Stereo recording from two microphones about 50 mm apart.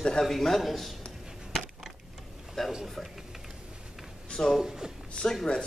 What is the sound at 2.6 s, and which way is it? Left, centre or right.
Speech, centre.